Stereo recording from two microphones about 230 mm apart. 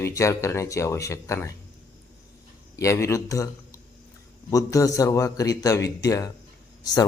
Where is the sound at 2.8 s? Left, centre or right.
Centre.